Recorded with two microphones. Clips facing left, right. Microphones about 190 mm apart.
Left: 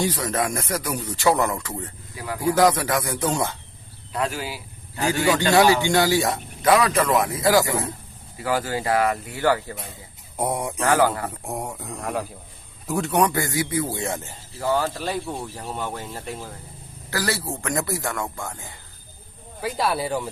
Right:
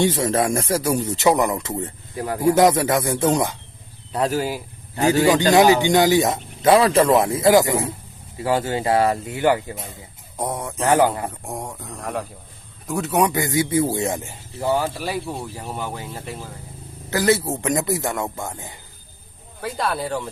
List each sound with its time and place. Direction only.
0.0 s speech: 25° right (ahead or behind)
2.1 s speech: 45° right (ahead or behind)
2.4 s speech: 25° right (ahead or behind)
4.1 s speech: 35° right (ahead or behind)
4.9 s speech: 20° right (ahead or behind)
8.4 s speech: 25° right (ahead or behind)
10.3 s speech: 10° left (ahead or behind)
10.8 s speech: 25° right (ahead or behind)
11.4 s speech: 5° left (ahead or behind)
17.1 s speech: 20° right (ahead or behind)
19.6 s speech: 5° left (ahead or behind)